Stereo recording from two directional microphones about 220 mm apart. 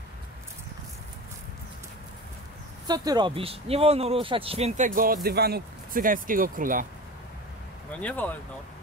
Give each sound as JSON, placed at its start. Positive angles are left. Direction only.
{"t": 2.9, "sound": "speech", "side_deg": -20}
{"t": 8.0, "sound": "speech", "side_deg": 5}